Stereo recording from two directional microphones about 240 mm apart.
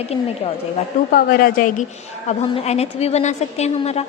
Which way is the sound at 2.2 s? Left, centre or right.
Left.